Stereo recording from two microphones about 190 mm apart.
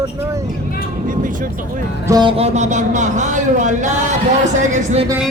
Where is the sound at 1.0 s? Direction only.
45° right (ahead or behind).